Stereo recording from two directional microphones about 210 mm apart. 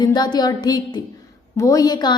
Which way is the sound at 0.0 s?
20° left (ahead or behind).